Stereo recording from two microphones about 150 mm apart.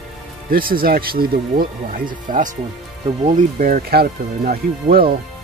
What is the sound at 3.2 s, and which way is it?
Speech, 60° right (ahead or behind).